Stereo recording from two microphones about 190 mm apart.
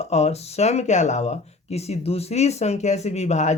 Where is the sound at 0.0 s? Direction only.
35° left (ahead or behind).